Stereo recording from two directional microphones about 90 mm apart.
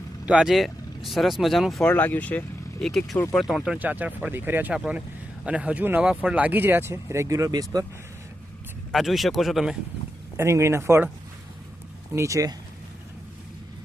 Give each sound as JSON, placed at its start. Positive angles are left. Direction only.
{"t": 0.3, "sound": "speech", "side_deg": -10}
{"t": 0.5, "sound": "speech", "side_deg": 0}
{"t": 1.8, "sound": "speech", "side_deg": 15}
{"t": 2.8, "sound": "speech", "side_deg": 5}
{"t": 3.8, "sound": "speech", "side_deg": -20}
{"t": 8.9, "sound": "speech", "side_deg": 0}
{"t": 10.3, "sound": "speech", "side_deg": -30}
{"t": 12.1, "sound": "speech", "side_deg": -35}